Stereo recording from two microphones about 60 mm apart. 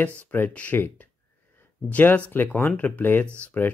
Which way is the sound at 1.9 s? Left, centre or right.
Left.